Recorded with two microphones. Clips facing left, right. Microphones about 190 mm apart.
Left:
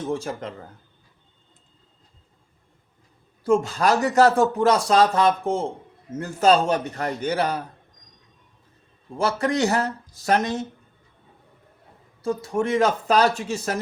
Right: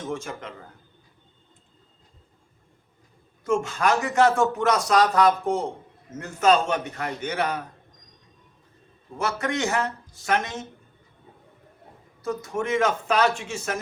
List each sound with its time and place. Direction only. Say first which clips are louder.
0.0 s speech: left 4 dB; 35° left (ahead or behind)
3.4 s speech: left 3 dB; 35° left (ahead or behind)
9.1 s speech: left 4 dB; 30° left (ahead or behind)
12.2 s speech: left 4 dB; 30° left (ahead or behind)